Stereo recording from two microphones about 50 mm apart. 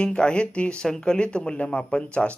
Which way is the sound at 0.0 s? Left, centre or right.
Centre.